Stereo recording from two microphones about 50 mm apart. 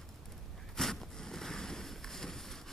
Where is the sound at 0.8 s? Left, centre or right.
Centre.